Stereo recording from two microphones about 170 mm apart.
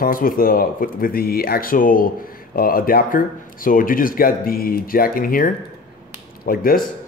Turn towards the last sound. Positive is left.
turn(degrees=60)  # may be behind; listen again after turning